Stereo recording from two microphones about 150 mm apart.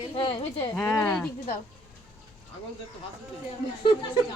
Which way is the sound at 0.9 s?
20° left (ahead or behind).